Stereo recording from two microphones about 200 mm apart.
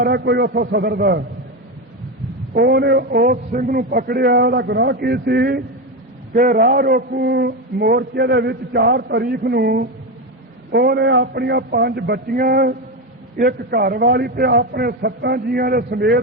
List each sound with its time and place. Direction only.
0.0 s a man's voice: 55° right (ahead or behind)
2.6 s a man's voice: 55° right (ahead or behind)